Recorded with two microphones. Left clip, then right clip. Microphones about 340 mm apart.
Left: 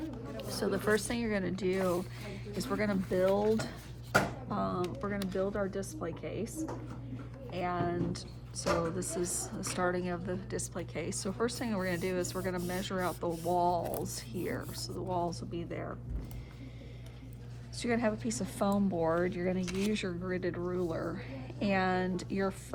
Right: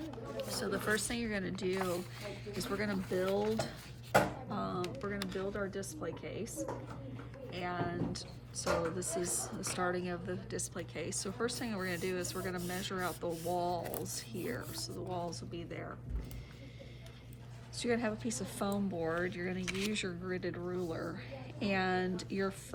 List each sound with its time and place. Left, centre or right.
0.4 s a woman's voice: centre
4.4 s speech: centre
7.5 s speech: centre
17.7 s a woman's voice: centre